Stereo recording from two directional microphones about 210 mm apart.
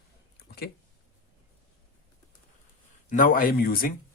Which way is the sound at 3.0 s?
40° left (ahead or behind).